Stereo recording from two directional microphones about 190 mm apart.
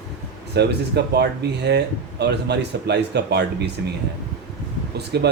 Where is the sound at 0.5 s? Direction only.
60° right (ahead or behind).